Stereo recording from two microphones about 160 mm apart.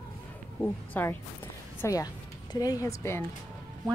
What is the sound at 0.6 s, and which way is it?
A woman's voice, 15° left (ahead or behind).